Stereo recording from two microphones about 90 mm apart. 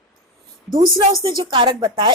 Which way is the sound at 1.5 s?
70° right (ahead or behind).